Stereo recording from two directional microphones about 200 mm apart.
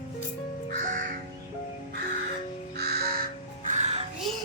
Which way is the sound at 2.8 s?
55° right (ahead or behind).